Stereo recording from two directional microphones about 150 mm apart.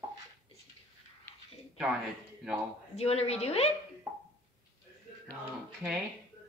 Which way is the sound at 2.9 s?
45° left (ahead or behind).